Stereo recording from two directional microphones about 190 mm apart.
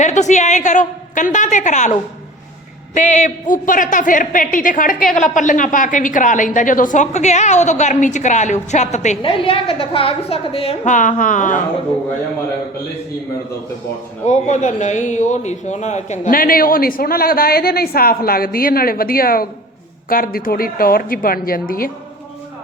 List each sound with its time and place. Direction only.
0.0 s a woman's voice: 40° left (ahead or behind)
14.3 s a man's voice: 40° left (ahead or behind)